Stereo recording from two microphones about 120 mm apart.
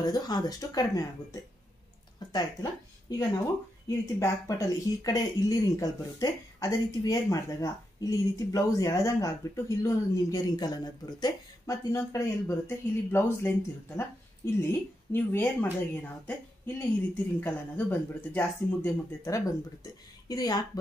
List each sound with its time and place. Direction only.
0.0 s a woman's voice: 35° left (ahead or behind)